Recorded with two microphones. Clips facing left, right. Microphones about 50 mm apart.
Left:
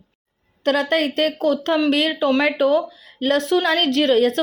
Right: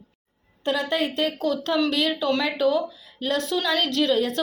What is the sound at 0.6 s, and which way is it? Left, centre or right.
A woman's voice, left.